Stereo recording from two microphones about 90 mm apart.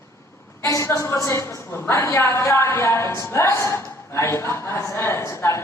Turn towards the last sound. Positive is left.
turn(degrees=30)  # may be behind; listen again after turning